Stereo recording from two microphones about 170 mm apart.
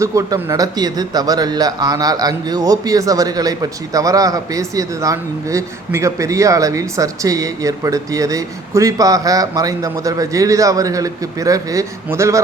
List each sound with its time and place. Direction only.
0.0 s speech: 20° right (ahead or behind)